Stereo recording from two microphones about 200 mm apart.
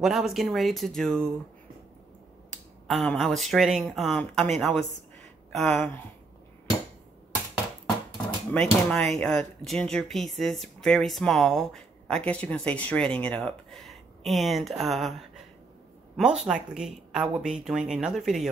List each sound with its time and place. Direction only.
0.0 s speech: centre (ahead or behind)
2.9 s a woman's voice: centre (ahead or behind)
8.5 s speech: 5° left (ahead or behind)